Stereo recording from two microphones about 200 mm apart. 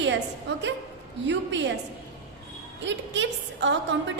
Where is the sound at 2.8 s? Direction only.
65° right (ahead or behind).